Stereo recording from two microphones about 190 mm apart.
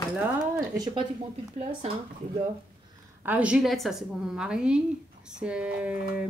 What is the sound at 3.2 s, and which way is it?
A woman's voice, 5° right (ahead or behind).